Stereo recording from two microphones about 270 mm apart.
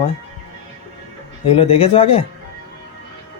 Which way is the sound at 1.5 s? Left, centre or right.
Left.